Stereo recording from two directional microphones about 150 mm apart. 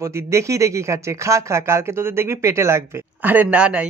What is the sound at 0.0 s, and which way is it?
Speech, 20° right (ahead or behind).